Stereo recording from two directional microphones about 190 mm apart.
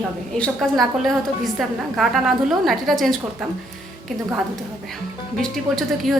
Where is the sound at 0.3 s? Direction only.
5° left (ahead or behind).